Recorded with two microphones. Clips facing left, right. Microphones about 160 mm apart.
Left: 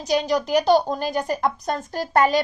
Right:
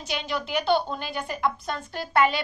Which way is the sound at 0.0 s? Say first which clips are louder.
Left 9 dB; 40° left (ahead or behind).